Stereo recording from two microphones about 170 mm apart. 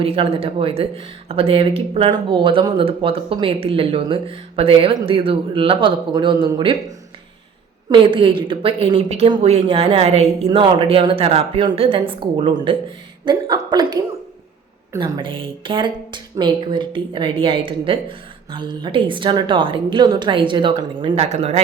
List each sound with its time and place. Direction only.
0.0 s speech: 35° right (ahead or behind)
7.9 s a woman's voice: 30° right (ahead or behind)